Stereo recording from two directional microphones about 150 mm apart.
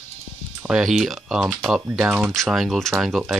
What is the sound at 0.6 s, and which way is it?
Speech, 5° right (ahead or behind).